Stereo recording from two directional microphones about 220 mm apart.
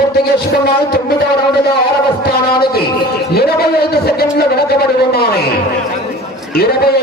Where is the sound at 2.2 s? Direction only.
45° left (ahead or behind).